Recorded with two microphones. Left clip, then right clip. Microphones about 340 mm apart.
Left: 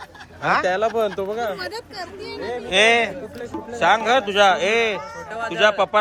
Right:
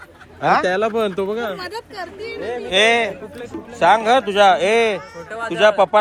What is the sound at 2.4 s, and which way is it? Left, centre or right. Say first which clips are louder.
Speech: right 2 dB; right.